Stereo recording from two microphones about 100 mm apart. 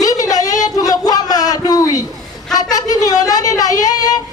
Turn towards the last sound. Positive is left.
turn(degrees=35)  # may be behind; listen again after turning